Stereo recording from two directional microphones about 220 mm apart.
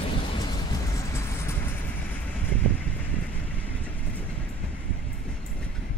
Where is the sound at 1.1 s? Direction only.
10° left (ahead or behind).